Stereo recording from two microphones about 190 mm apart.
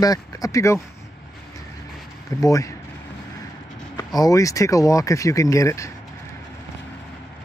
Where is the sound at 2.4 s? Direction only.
15° left (ahead or behind).